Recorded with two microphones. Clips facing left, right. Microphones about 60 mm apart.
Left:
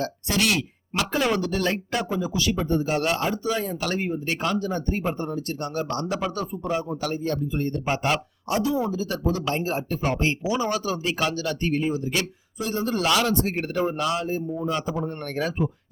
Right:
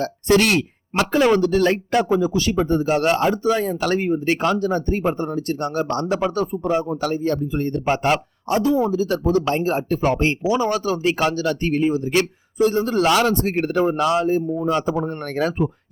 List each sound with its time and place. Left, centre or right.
0.0 s speech: right
7.0 s speech: right
8.0 s speech: right